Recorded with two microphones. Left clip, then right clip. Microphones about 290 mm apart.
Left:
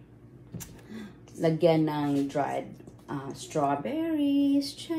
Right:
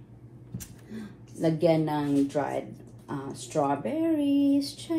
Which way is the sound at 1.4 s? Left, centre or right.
Centre.